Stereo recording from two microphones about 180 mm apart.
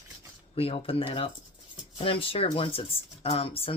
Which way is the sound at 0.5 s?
30° left (ahead or behind).